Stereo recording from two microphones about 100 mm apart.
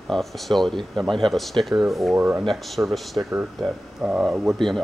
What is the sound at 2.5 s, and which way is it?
Speech, centre (ahead or behind).